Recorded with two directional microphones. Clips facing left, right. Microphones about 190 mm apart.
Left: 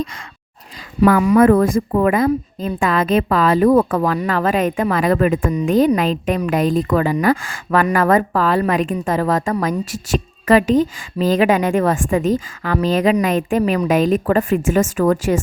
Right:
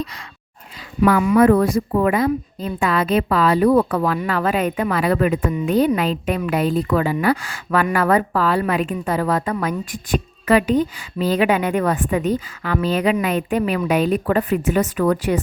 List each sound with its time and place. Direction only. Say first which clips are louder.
0.0 s a woman's voice: left 3 dB; 45° left (ahead or behind)